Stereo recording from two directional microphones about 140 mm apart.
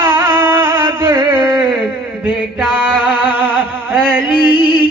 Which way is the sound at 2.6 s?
5° right (ahead or behind).